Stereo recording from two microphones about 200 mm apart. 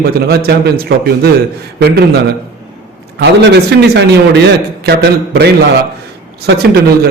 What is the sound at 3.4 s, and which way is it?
Speech, 55° right (ahead or behind).